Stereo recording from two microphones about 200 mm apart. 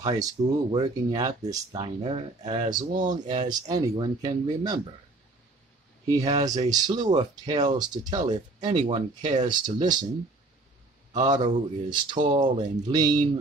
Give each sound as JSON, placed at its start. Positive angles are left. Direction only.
{"t": 0.0, "sound": "speech", "side_deg": -25}
{"t": 6.0, "sound": "speech", "side_deg": -15}
{"t": 9.5, "sound": "speech", "side_deg": -20}
{"t": 11.2, "sound": "speech", "side_deg": -20}